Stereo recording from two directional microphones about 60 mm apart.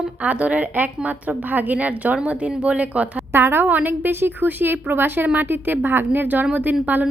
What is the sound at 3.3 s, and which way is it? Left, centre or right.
A woman's voice, right.